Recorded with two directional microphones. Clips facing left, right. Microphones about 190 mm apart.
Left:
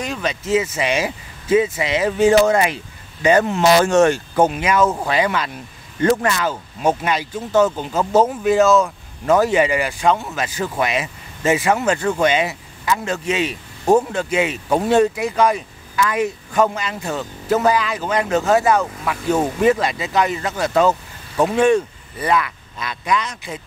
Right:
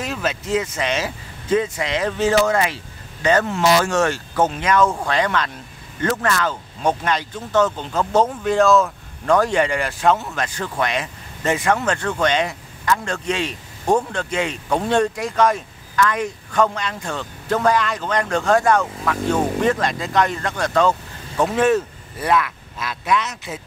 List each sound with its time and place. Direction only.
0.0 s speech: centre (ahead or behind)